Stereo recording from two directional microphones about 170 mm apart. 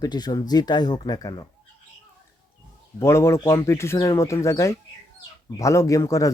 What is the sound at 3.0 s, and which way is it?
Speech, 15° left (ahead or behind).